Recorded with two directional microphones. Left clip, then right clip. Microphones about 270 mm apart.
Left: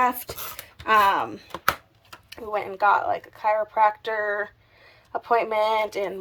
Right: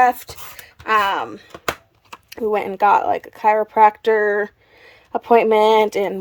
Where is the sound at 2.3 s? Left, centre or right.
Right.